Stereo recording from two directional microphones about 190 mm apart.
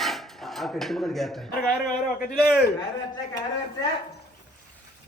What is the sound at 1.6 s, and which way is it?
Speech, 50° left (ahead or behind).